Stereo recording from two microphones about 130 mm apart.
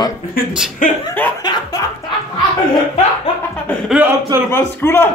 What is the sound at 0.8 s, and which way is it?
Speech, 90° left.